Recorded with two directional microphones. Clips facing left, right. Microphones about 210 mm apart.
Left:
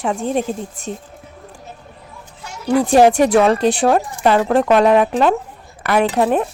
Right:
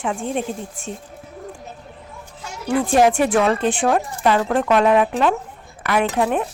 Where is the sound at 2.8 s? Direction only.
35° left (ahead or behind).